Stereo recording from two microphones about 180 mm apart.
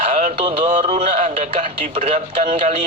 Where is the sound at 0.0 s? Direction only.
35° right (ahead or behind).